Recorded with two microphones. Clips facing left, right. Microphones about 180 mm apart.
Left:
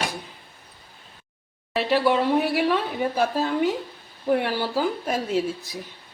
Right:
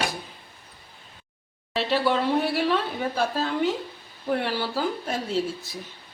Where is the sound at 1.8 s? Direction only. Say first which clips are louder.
Left 3 dB; 10° left (ahead or behind).